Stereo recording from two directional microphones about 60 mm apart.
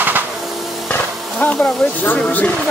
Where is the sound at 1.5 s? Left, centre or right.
Left.